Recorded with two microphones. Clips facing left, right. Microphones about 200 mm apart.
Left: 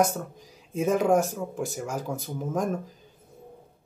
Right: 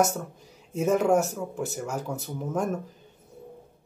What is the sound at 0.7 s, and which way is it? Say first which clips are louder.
Speech: even; centre (ahead or behind).